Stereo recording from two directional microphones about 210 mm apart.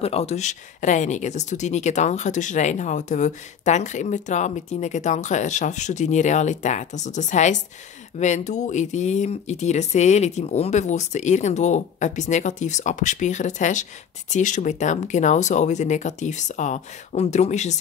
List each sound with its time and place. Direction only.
0.0 s speech: 30° left (ahead or behind)